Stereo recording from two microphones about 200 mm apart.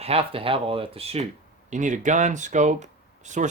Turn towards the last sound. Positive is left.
turn(degrees=-35)  # may be behind; listen again after turning